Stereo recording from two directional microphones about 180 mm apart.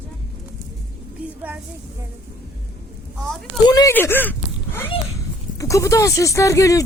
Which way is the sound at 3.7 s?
20° left (ahead or behind).